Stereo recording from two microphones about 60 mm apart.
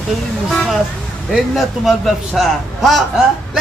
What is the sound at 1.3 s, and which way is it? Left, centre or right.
A man's voice, centre.